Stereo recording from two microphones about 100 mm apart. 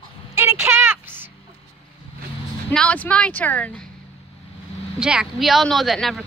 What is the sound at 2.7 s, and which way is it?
Speech, 15° left (ahead or behind).